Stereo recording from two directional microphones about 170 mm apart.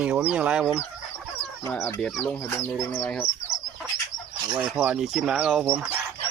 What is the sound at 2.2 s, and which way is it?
Speech, 10° left (ahead or behind).